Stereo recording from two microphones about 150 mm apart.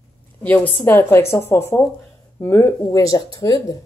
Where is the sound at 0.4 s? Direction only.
10° left (ahead or behind).